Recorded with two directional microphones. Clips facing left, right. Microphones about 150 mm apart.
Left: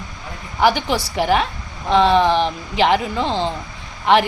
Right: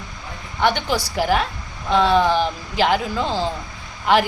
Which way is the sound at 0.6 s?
5° left (ahead or behind).